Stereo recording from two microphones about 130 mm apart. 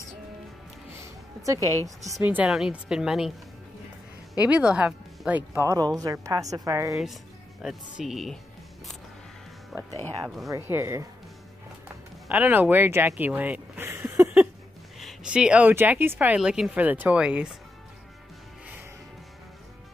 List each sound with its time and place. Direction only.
1.0 s a sound: 25° right (ahead or behind)
2.2 s a woman's voice: 10° right (ahead or behind)
4.4 s speech: 10° right (ahead or behind)
5.5 s a woman's voice: 25° right (ahead or behind)
7.6 s a woman's voice: centre (ahead or behind)
9.7 s a woman's voice: 5° right (ahead or behind)
10.7 s a woman's voice: 20° right (ahead or behind)
12.3 s speech: 15° right (ahead or behind)
15.0 s speech: 5° right (ahead or behind)
16.3 s speech: 5° right (ahead or behind)